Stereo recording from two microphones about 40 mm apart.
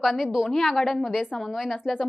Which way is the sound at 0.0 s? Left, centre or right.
Centre.